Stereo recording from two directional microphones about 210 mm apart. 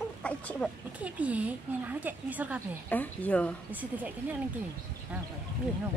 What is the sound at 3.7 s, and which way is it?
Speech, 10° right (ahead or behind).